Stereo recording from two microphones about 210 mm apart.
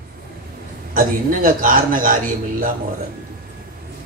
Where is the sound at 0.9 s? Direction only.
40° right (ahead or behind).